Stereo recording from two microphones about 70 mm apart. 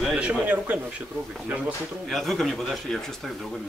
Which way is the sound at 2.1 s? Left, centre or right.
Centre.